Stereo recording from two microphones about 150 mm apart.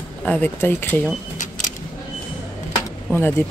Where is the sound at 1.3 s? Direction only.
55° left (ahead or behind).